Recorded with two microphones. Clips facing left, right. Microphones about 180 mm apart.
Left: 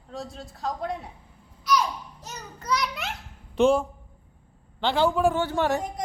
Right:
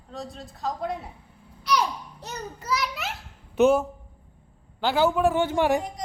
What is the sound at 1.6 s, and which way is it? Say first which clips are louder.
Babbling: even; 65° right (ahead or behind).